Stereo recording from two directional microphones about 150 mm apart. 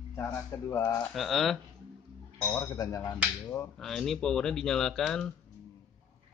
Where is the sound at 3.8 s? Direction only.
Centre (ahead or behind).